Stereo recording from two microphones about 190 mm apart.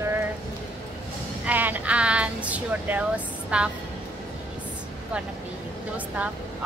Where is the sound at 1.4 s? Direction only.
10° right (ahead or behind).